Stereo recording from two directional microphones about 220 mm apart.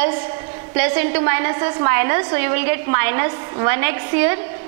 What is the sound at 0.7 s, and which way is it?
A woman's voice, 10° right (ahead or behind).